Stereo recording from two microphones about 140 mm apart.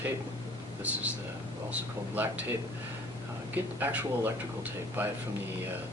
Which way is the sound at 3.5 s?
15° right (ahead or behind).